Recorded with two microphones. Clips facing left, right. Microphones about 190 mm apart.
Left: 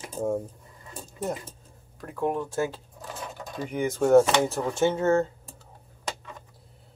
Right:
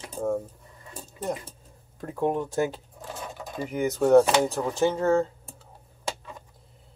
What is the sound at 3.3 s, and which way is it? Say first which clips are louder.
Speech: right 1 dB; centre (ahead or behind).